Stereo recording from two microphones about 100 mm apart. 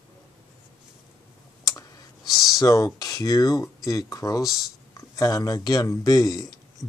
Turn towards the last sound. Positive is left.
turn(degrees=40)  # may be behind; listen again after turning